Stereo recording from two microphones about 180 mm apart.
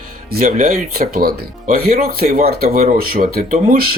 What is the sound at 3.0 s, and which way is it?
Speech, 55° right (ahead or behind).